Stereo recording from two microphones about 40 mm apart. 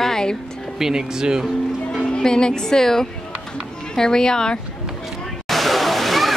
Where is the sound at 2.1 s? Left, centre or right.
Centre.